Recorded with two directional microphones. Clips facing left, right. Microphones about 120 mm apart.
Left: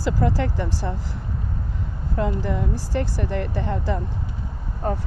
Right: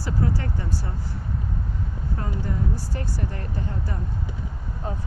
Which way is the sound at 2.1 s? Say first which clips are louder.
Left 7 dB; 90° left.